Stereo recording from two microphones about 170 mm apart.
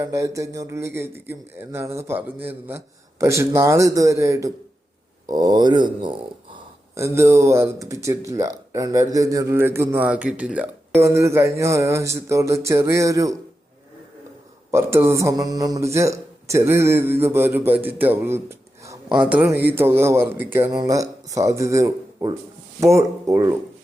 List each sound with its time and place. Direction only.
0.0 s speech: 20° right (ahead or behind)
6.9 s speech: 15° right (ahead or behind)
14.7 s speech: 15° right (ahead or behind)